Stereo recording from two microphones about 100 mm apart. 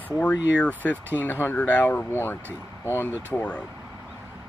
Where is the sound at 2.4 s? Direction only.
20° right (ahead or behind).